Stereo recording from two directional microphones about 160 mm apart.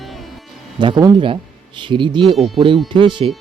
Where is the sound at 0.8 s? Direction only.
30° right (ahead or behind).